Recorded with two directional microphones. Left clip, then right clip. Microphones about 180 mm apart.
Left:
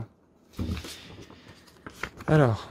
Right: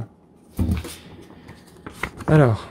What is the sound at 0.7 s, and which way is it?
Dog, 30° left (ahead or behind).